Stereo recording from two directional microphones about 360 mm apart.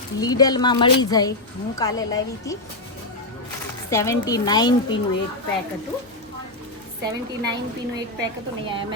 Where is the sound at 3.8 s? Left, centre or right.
Centre.